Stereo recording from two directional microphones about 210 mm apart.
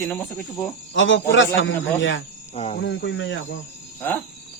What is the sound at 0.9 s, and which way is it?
A man's voice, 65° left (ahead or behind).